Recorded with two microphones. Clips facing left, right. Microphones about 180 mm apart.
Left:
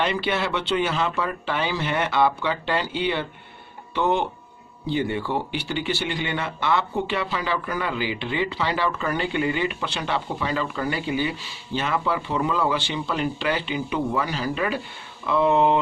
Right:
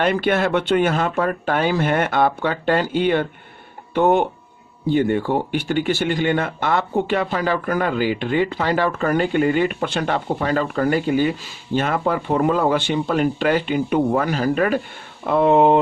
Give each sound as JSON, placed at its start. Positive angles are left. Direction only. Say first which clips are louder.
{"t": 0.0, "sound": "speech", "louder": "right 6 dB", "side_deg": -50}